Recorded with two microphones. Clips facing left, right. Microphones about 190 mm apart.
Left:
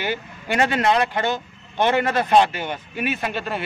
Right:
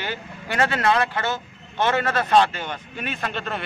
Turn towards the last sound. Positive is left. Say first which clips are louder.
# left 2 dB
turn(degrees=5)  # may be behind; listen again after turning